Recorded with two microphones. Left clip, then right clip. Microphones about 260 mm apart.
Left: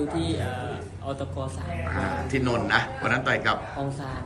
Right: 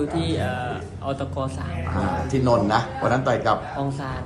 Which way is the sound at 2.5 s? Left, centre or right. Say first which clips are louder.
Right 5 dB; centre.